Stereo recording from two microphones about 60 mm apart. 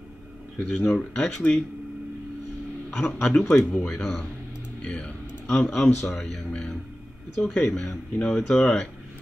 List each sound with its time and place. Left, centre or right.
0.6 s speech: centre
2.9 s a man's voice: centre
4.8 s a sound: centre
6.0 s a man's voice: centre